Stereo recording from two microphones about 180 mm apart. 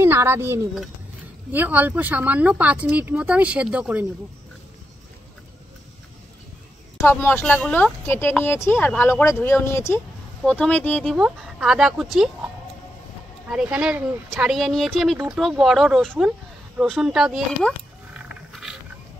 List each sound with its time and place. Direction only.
0.0 s a woman's voice: 15° right (ahead or behind)
7.0 s speech: 15° left (ahead or behind)
10.4 s speech: 5° left (ahead or behind)
11.1 s speech: 5° right (ahead or behind)
13.5 s speech: 5° right (ahead or behind)
18.3 s a sound: centre (ahead or behind)